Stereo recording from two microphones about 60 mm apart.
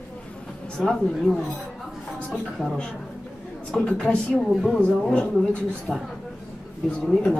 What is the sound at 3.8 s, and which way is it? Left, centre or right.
Speech, centre.